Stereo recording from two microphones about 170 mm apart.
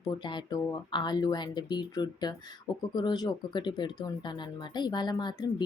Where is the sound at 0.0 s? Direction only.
25° left (ahead or behind).